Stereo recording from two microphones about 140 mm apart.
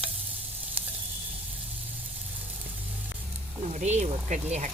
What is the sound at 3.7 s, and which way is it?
Speech, 55° right (ahead or behind).